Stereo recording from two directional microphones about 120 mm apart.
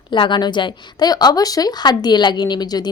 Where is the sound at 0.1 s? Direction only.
40° left (ahead or behind).